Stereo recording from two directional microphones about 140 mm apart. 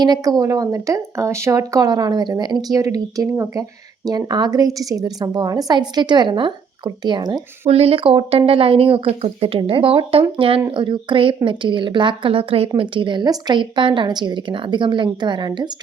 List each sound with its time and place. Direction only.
0.0 s a woman's voice: 30° right (ahead or behind)
7.7 s a woman's voice: 45° right (ahead or behind)